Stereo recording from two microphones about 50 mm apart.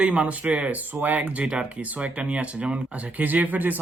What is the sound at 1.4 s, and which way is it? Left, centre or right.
Speech, centre.